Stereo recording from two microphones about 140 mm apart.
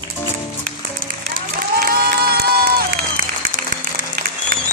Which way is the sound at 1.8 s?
90° right.